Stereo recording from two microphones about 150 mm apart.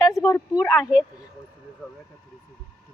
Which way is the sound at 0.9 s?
5° right (ahead or behind).